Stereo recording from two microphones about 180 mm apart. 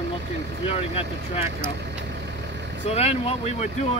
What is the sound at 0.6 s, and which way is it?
Speech, 35° left (ahead or behind).